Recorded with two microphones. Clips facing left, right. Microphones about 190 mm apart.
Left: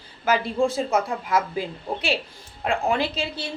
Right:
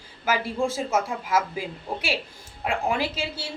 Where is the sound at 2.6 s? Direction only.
10° right (ahead or behind).